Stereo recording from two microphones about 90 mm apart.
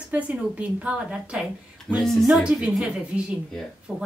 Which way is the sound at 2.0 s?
Centre (ahead or behind).